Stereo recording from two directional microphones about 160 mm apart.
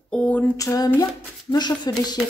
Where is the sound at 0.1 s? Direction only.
5° left (ahead or behind).